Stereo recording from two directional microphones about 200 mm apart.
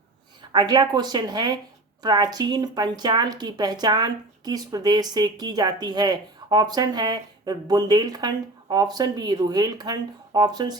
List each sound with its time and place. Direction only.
0.5 s a woman's voice: 20° right (ahead or behind)